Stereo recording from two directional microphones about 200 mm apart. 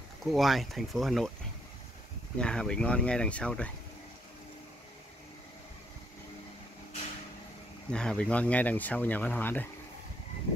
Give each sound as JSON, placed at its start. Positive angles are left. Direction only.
{"t": 0.2, "sound": "speech", "side_deg": 0}
{"t": 2.3, "sound": "speech", "side_deg": 5}
{"t": 7.9, "sound": "speech", "side_deg": 5}